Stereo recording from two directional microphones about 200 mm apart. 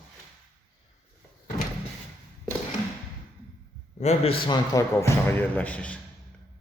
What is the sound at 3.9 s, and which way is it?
A man's voice, 30° left (ahead or behind).